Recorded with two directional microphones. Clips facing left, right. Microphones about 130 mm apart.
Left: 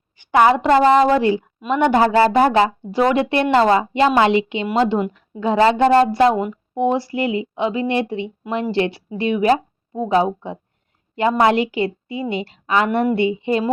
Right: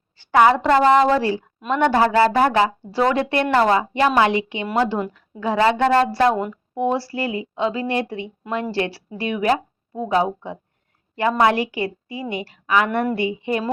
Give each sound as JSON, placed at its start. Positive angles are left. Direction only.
{"t": 0.2, "sound": "a woman's voice", "side_deg": 20}